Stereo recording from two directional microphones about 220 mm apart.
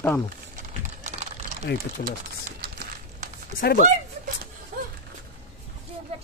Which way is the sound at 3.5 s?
40° left (ahead or behind).